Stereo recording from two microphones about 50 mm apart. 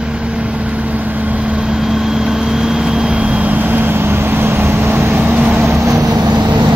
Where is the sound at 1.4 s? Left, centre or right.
Centre; by 5.6 s right.